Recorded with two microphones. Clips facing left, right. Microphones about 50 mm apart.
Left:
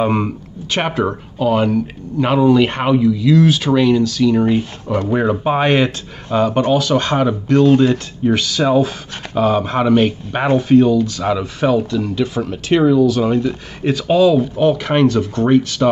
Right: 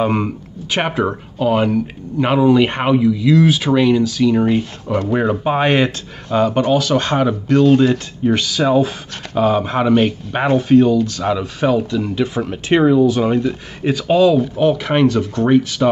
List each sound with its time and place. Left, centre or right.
0.0 s speech: centre
0.7 s speech: centre
11.9 s speech: centre
13.5 s speech: centre